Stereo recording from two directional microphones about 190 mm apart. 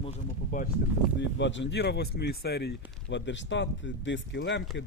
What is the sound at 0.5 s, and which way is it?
Speech, 40° left (ahead or behind).